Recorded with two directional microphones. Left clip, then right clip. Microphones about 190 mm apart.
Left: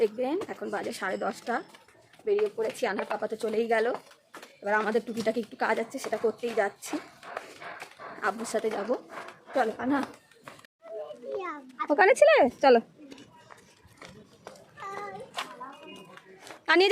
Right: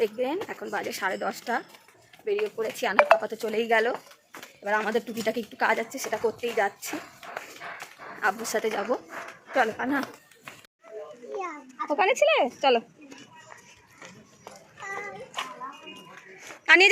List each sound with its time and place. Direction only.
0.0 s a woman's voice: centre (ahead or behind)
8.2 s a woman's voice: 5° left (ahead or behind)
11.9 s speech: 50° left (ahead or behind)
16.6 s a woman's voice: 25° left (ahead or behind)